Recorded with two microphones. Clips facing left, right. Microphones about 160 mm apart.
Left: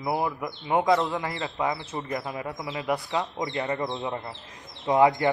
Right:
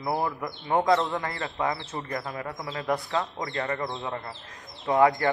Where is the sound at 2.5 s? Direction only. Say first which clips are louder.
Even; 10° left (ahead or behind).